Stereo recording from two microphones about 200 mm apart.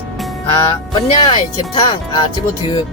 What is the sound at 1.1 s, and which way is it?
Speech, 20° left (ahead or behind).